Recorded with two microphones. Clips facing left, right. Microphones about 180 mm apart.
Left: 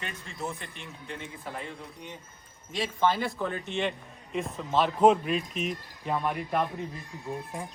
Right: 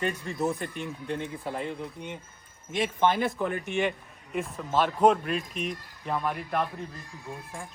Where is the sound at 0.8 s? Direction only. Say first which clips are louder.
Right 8 dB; 40° right (ahead or behind).